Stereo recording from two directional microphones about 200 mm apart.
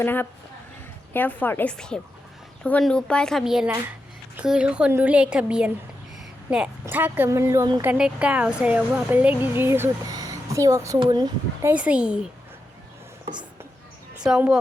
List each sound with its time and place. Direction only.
0.0 s a woman's voice: 10° left (ahead or behind); by 11.7 s 20° right (ahead or behind)
11.7 s speech: 5° right (ahead or behind)
14.2 s a woman's voice: 5° right (ahead or behind)